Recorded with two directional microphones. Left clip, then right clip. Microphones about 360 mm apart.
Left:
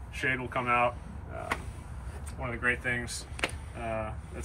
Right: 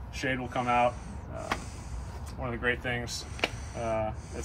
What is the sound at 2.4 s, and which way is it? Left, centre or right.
Speech, centre.